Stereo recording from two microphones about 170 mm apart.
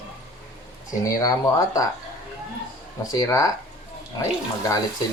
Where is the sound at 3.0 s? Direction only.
20° left (ahead or behind).